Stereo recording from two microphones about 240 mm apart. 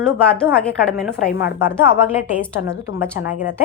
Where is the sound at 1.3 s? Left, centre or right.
Left.